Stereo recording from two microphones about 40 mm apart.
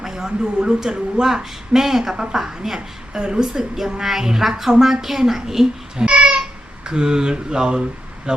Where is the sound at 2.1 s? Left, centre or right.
Right.